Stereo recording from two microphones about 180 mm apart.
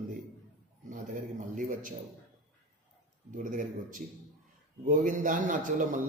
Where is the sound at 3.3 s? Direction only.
45° right (ahead or behind).